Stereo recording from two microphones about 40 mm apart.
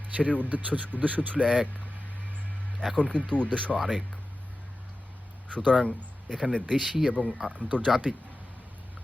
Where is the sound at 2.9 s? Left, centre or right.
Left.